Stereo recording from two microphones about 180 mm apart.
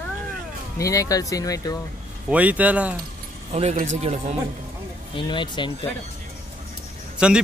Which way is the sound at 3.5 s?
35° right (ahead or behind).